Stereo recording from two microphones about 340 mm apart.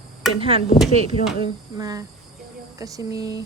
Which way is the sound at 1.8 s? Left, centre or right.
Centre.